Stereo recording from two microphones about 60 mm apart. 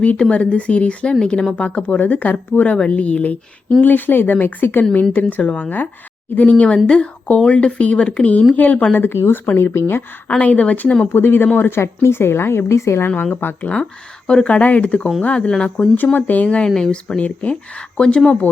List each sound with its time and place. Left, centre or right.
0.2 s speech: centre
1.2 s speech: centre
1.5 s speech: left
9.0 s a woman's voice: left
10.2 s speech: left
11.1 s a woman's voice: left
13.3 s speech: left
13.6 s speech: centre
16.1 s speech: left